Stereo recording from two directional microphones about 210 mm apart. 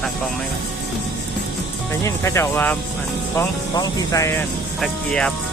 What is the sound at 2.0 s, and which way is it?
Speech, 15° left (ahead or behind).